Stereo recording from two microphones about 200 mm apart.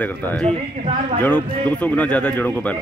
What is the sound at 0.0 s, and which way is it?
Speech, 10° left (ahead or behind).